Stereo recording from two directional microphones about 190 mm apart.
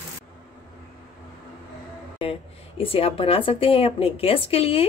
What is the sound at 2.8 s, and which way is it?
A woman's voice, 30° left (ahead or behind).